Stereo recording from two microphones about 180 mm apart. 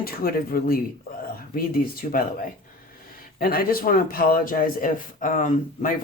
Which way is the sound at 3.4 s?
55° left (ahead or behind).